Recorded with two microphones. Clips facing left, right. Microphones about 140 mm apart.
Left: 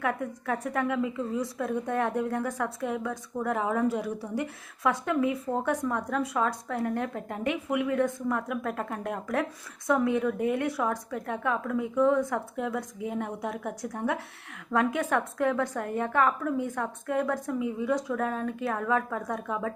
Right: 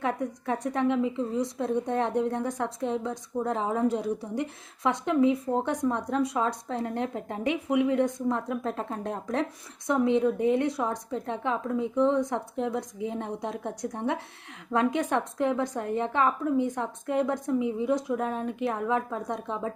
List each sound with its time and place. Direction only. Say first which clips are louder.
0.0 s a woman's voice: right 1 dB; 25° right (ahead or behind)